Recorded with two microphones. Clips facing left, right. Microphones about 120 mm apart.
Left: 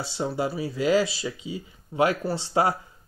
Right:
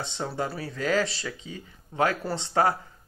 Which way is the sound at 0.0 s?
5° left (ahead or behind).